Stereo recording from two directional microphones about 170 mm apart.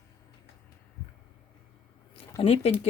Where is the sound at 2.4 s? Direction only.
35° left (ahead or behind).